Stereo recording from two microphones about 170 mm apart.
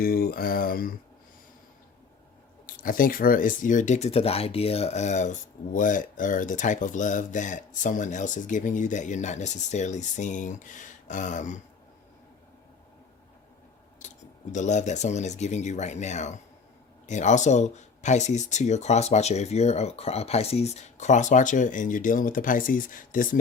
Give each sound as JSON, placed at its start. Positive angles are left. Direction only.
{"t": 0.0, "sound": "speech", "side_deg": 60}
{"t": 2.6, "sound": "speech", "side_deg": 55}
{"t": 14.0, "sound": "a sound", "side_deg": 45}
{"t": 14.5, "sound": "speech", "side_deg": 45}